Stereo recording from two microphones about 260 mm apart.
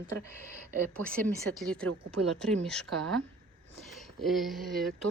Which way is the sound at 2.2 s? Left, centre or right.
Right.